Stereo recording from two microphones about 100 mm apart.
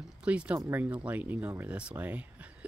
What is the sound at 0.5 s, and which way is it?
Speech, 25° right (ahead or behind).